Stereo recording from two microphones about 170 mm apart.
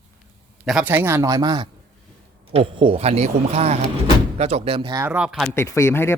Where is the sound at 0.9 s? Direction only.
15° right (ahead or behind); by 5.0 s 30° right (ahead or behind).